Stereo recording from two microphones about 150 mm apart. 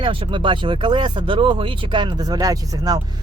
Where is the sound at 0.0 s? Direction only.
35° right (ahead or behind).